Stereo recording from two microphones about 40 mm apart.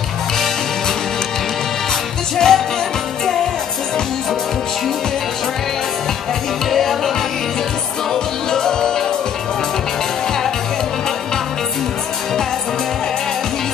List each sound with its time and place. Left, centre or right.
2.3 s music: centre
6.7 s music: centre
8.1 s music: centre